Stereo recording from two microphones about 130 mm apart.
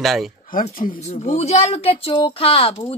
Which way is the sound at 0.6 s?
75° left (ahead or behind).